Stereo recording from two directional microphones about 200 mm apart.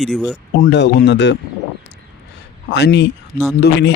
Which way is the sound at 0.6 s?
60° left (ahead or behind).